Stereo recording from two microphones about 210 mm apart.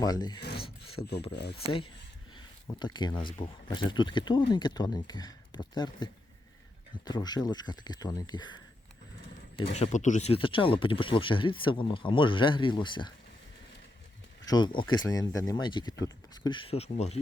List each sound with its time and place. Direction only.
0.0 s speech: 20° left (ahead or behind)
1.0 s speech: 30° left (ahead or behind)
1.3 s speech: 50° left (ahead or behind)
1.6 s speech: 25° left (ahead or behind)
9.7 s speech: 35° left (ahead or behind)
14.4 s speech: 20° left (ahead or behind)